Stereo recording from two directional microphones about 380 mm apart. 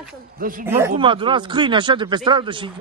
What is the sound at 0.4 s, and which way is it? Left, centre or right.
Speech, right.